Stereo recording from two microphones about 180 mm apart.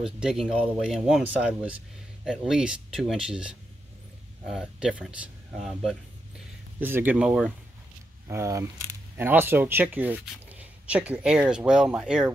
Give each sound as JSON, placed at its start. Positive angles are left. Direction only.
{"t": 0.0, "sound": "speech", "side_deg": -5}
{"t": 6.8, "sound": "speech", "side_deg": -10}
{"t": 8.3, "sound": "speech", "side_deg": -15}